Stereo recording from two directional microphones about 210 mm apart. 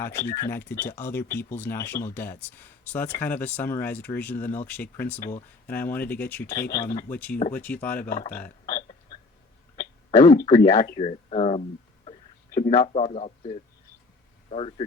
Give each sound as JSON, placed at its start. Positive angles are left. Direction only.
{"t": 0.0, "sound": "speech", "side_deg": 10}
{"t": 8.3, "sound": "burping", "side_deg": 10}
{"t": 10.2, "sound": "speech", "side_deg": 20}
{"t": 10.8, "sound": "speech", "side_deg": 35}
{"t": 12.5, "sound": "a sound", "side_deg": 40}
{"t": 12.9, "sound": "speech", "side_deg": 30}